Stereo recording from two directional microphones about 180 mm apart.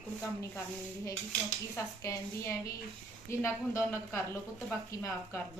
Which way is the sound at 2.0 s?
20° left (ahead or behind).